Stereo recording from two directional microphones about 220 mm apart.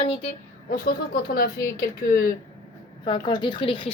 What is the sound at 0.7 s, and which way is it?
Speech, 40° left (ahead or behind).